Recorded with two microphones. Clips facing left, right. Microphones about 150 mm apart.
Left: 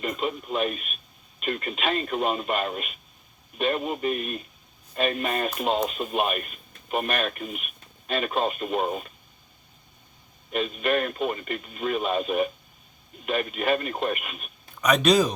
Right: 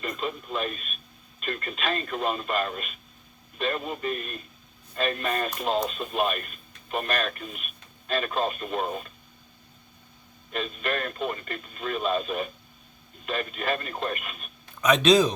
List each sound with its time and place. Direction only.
0.0 s speech: 20° left (ahead or behind)
10.5 s a man's voice: 20° left (ahead or behind)